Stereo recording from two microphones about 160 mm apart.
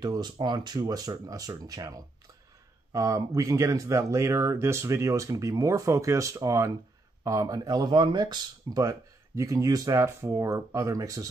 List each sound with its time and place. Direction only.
0.0 s speech: 25° right (ahead or behind)